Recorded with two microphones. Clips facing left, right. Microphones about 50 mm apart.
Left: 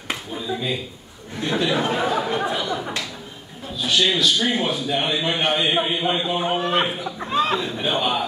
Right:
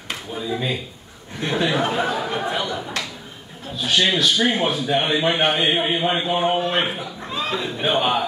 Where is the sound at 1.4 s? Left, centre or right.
Right.